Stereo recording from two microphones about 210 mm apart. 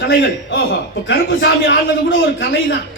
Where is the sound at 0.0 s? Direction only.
50° left (ahead or behind).